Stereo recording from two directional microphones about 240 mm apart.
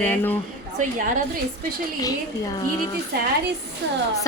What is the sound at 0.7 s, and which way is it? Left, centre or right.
Speech, right.